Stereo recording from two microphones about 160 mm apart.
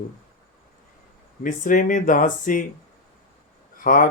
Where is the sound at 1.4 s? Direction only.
55° left (ahead or behind).